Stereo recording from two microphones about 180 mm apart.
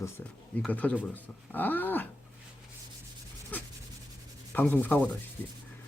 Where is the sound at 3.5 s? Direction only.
10° left (ahead or behind).